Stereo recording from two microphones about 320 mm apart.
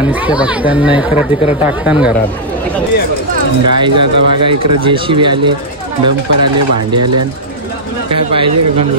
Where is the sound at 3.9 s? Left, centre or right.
Right.